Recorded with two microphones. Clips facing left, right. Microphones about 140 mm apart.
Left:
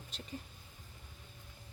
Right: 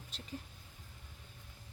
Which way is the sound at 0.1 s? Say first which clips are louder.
Left 2 dB; centre (ahead or behind).